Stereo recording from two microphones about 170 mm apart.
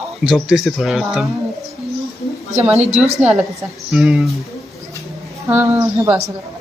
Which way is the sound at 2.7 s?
40° right (ahead or behind).